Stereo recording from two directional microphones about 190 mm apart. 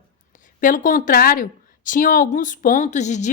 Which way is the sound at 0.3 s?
45° left (ahead or behind).